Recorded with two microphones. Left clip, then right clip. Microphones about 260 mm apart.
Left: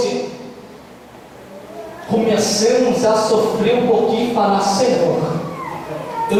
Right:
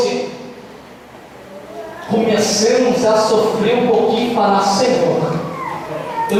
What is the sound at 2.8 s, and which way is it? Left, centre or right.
A man's voice, centre.